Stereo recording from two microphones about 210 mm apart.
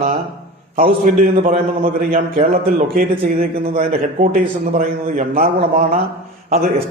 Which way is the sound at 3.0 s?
45° right (ahead or behind).